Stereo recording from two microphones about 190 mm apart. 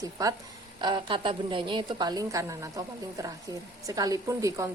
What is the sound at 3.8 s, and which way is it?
Speech, 20° right (ahead or behind).